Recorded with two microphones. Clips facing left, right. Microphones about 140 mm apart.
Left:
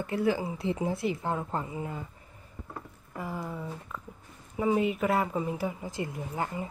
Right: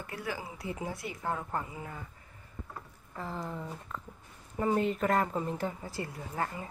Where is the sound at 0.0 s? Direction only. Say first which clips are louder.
Left 10 dB; 25° left (ahead or behind).